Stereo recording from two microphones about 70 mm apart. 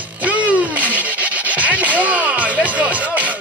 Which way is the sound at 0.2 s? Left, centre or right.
Right.